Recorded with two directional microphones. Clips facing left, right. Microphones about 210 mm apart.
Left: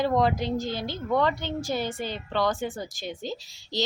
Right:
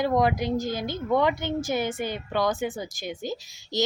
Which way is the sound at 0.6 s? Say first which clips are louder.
Right 2 dB; 45° right (ahead or behind).